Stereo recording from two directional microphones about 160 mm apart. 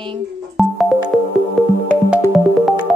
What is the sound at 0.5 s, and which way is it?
Music, centre (ahead or behind).